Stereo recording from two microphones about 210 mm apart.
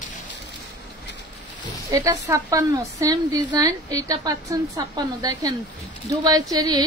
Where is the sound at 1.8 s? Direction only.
15° right (ahead or behind).